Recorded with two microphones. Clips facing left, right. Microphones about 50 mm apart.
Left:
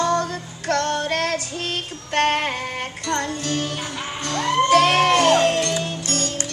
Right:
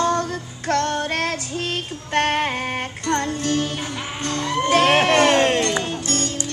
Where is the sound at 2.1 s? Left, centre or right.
Right.